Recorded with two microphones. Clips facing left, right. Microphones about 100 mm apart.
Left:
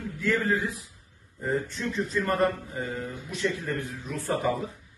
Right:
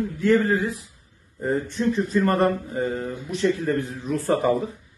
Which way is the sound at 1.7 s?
50° right (ahead or behind).